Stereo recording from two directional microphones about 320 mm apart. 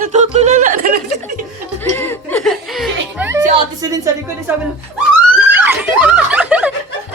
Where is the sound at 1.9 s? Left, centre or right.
Centre.